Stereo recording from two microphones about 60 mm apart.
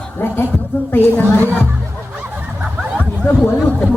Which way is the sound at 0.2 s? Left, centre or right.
Left.